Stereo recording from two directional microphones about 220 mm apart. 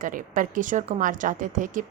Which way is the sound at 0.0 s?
35° right (ahead or behind).